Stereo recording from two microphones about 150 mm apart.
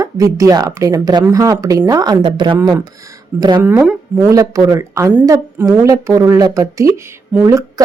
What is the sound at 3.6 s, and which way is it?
Speech, 10° right (ahead or behind).